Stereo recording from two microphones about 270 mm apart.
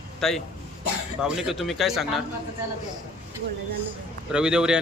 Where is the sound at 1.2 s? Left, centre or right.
Centre.